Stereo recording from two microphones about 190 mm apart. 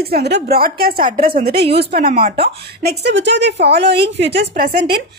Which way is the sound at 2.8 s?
65° right (ahead or behind).